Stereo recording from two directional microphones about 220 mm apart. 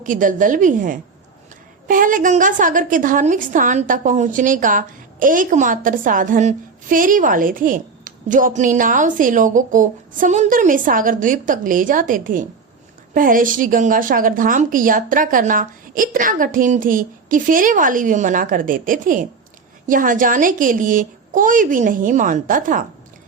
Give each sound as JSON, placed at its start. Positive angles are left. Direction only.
{"t": 0.0, "sound": "a woman's voice", "side_deg": -35}